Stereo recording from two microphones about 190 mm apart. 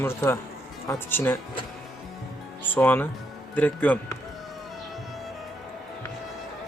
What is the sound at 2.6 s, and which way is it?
Speech, 10° left (ahead or behind).